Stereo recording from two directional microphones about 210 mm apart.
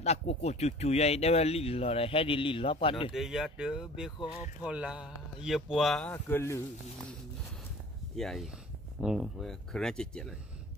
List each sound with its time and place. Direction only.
0.0 s speech: 30° left (ahead or behind)
3.1 s speech: centre (ahead or behind)
6.1 s speech: 15° left (ahead or behind)
8.2 s speech: centre (ahead or behind)